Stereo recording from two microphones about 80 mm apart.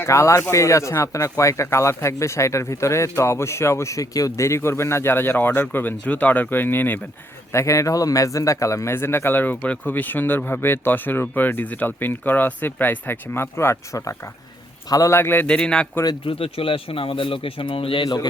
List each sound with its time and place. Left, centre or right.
0.0 s speech: left
7.5 s a man's voice: left
15.1 s speech: left
15.4 s a man's voice: centre
16.6 s a man's voice: left